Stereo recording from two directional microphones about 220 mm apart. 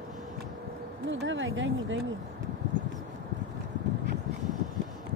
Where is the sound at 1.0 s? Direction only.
55° right (ahead or behind).